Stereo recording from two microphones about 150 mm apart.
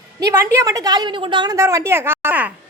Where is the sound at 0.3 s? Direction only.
20° right (ahead or behind).